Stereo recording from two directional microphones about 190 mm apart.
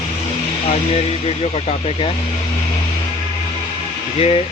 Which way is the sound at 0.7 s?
30° left (ahead or behind).